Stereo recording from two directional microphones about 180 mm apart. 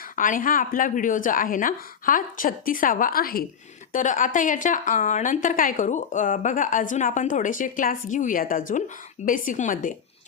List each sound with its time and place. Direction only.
0.2 s a woman's voice: 50° left (ahead or behind)